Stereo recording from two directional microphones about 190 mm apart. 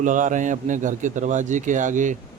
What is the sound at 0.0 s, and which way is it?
A man's voice, 40° right (ahead or behind).